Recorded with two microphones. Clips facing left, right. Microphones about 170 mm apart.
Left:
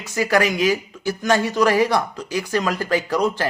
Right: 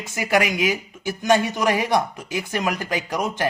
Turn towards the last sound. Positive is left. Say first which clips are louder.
# left 5 dB
turn(degrees=-15)  # may be behind; listen again after turning